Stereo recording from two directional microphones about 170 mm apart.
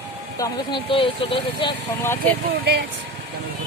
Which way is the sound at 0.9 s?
30° left (ahead or behind).